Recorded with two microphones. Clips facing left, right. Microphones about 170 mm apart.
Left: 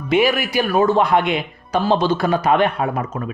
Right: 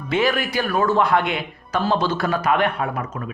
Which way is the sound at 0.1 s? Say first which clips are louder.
Left 4 dB; 10° left (ahead or behind).